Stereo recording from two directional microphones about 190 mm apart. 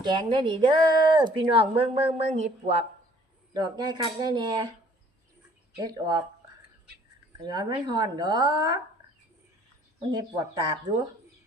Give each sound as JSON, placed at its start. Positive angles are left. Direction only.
{"t": 0.0, "sound": "speech", "side_deg": -25}
{"t": 3.5, "sound": "speech", "side_deg": -20}
{"t": 5.8, "sound": "speech", "side_deg": -20}
{"t": 7.4, "sound": "speech", "side_deg": -20}
{"t": 10.1, "sound": "speech", "side_deg": -20}